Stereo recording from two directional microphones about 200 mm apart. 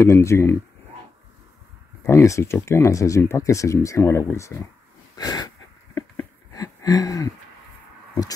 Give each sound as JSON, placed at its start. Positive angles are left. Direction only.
{"t": 0.0, "sound": "speech", "side_deg": 15}
{"t": 2.0, "sound": "speech", "side_deg": 15}
{"t": 5.1, "sound": "a sound", "side_deg": 20}